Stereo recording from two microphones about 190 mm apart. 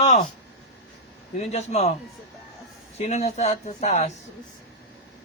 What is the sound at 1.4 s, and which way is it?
Speech, 35° left (ahead or behind).